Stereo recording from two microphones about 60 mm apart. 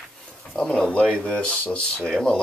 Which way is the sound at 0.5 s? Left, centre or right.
Centre.